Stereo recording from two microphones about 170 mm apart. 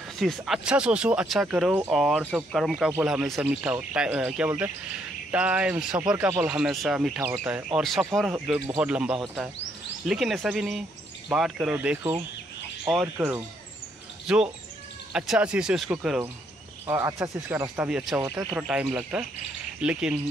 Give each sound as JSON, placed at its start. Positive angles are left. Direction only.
{"t": 0.2, "sound": "speech", "side_deg": 0}
{"t": 16.8, "sound": "speech", "side_deg": -15}
{"t": 18.2, "sound": "speech", "side_deg": -20}
{"t": 18.6, "sound": "speech", "side_deg": -5}